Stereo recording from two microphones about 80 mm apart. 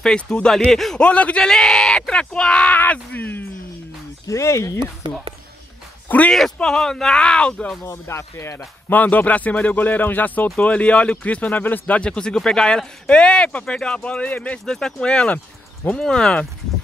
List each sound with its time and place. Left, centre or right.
0.0 s speech: centre
1.0 s speech: centre
4.3 s speech: left
5.0 s speech: right
6.0 s speech: centre
6.3 s speech: centre
7.8 s speech: left
8.9 s speech: left
11.9 s speech: centre
15.9 s speech: centre